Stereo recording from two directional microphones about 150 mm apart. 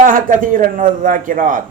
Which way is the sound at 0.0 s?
65° right (ahead or behind).